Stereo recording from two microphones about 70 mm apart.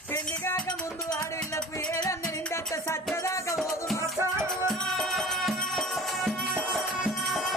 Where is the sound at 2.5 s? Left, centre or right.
Left.